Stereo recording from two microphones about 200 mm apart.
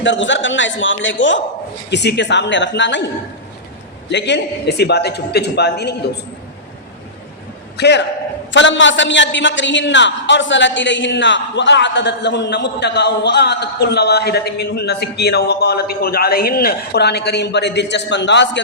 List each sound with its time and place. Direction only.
0.0 s a man's voice: 65° left (ahead or behind)
4.1 s a man's voice: 60° left (ahead or behind)
7.8 s a man's voice: 60° left (ahead or behind)